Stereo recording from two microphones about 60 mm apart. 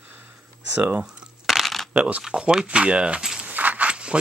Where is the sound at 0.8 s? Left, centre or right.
Right.